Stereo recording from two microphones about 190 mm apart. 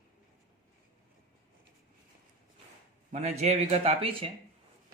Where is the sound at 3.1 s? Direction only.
35° right (ahead or behind).